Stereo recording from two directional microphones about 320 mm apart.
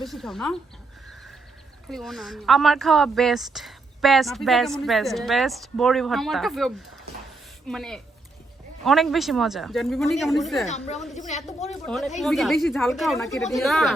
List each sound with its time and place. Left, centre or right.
0.0 s speech: centre
1.9 s speech: centre
10.7 s a woman's voice: left
11.9 s speech: centre